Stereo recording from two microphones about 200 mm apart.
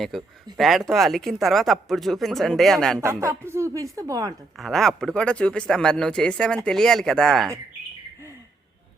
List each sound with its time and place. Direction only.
0.1 s speech: centre (ahead or behind)
3.0 s speech: 15° right (ahead or behind)
4.5 s speech: centre (ahead or behind)